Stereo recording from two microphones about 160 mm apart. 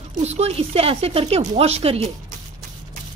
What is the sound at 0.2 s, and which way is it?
A woman's voice, 40° right (ahead or behind).